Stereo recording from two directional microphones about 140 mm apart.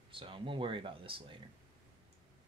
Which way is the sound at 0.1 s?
40° right (ahead or behind).